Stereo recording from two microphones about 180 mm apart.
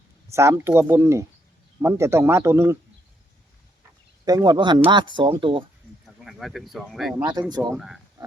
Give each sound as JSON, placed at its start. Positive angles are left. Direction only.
{"t": 0.3, "sound": "speech", "side_deg": -15}
{"t": 4.3, "sound": "speech", "side_deg": -20}
{"t": 6.2, "sound": "speech", "side_deg": 0}
{"t": 7.5, "sound": "speech", "side_deg": -20}
{"t": 7.8, "sound": "speech", "side_deg": 0}